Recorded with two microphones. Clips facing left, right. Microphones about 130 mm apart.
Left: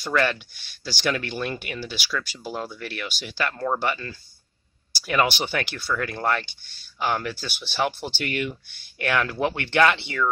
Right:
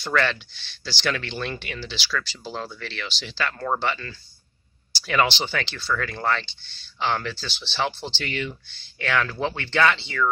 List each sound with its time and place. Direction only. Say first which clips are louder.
0.0 s speech: left 1 dB; 10° left (ahead or behind)